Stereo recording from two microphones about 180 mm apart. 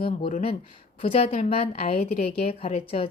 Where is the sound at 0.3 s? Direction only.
40° left (ahead or behind).